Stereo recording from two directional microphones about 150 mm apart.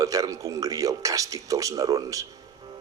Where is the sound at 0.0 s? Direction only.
20° right (ahead or behind).